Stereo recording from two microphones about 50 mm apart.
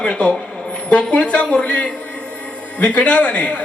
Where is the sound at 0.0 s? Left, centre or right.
Left.